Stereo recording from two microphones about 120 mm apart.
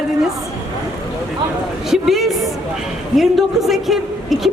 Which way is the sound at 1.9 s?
Centre (ahead or behind).